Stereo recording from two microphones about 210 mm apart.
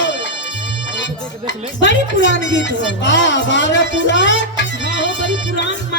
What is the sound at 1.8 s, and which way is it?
A woman's voice, 60° left (ahead or behind).